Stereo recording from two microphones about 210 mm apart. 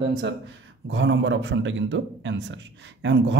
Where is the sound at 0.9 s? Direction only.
60° right (ahead or behind).